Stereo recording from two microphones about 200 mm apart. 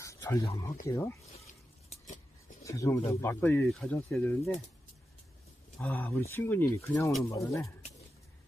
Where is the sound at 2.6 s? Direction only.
15° left (ahead or behind).